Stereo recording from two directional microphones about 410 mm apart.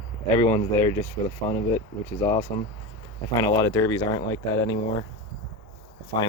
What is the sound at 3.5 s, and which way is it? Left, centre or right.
Speech, centre.